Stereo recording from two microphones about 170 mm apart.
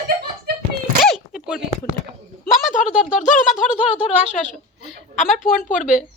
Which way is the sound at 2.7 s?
50° left (ahead or behind).